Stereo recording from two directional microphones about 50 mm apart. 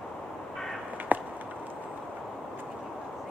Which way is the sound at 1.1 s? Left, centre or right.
Right.